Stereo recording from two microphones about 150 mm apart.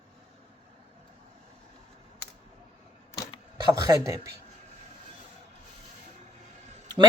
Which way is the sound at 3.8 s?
25° right (ahead or behind).